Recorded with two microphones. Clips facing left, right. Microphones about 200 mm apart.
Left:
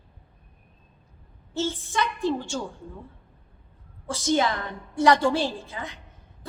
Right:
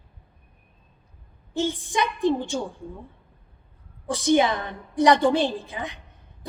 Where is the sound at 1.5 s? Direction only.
15° right (ahead or behind).